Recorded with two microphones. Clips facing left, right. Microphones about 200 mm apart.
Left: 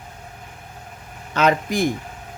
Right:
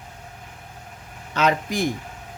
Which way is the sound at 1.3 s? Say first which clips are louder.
Left 3 dB; 55° left (ahead or behind).